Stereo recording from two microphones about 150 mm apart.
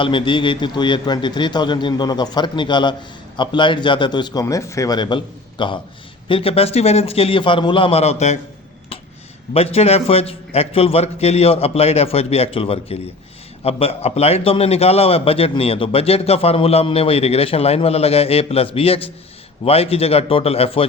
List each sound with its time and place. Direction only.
0.0 s a man's voice: 35° left (ahead or behind)
9.5 s a man's voice: 45° left (ahead or behind)